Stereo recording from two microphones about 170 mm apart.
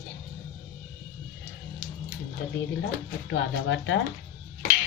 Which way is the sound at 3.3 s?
90° left.